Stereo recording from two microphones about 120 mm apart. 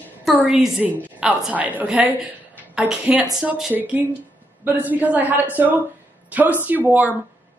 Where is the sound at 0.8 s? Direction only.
5° right (ahead or behind).